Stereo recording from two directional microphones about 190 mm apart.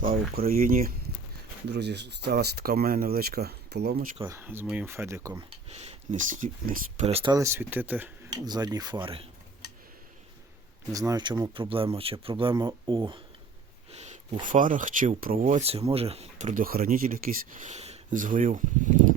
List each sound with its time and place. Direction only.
0.0 s speech: 50° right (ahead or behind)
1.7 s speech: 65° right (ahead or behind)
4.2 s speech: 15° right (ahead or behind); by 7.0 s 45° right (ahead or behind)
7.0 s speech: 30° right (ahead or behind)
7.3 s speech: 15° right (ahead or behind)
8.3 s speech: 20° right (ahead or behind)
10.9 s speech: 20° right (ahead or behind)
13.9 s a sound: 35° right (ahead or behind)
14.4 s speech: 45° right (ahead or behind)